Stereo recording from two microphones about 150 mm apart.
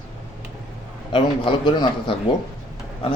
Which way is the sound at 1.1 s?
30° left (ahead or behind).